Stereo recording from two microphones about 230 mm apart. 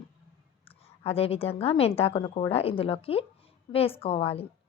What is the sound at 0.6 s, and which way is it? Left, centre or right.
A woman's voice, left.